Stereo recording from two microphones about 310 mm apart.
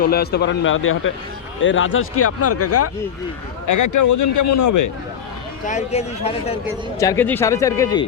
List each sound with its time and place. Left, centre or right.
0.0 s a man's voice: left
3.7 s a man's voice: left
5.6 s a man's voice: left
7.0 s speech: centre